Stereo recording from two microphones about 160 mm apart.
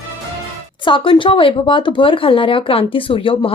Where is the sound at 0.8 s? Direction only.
30° left (ahead or behind).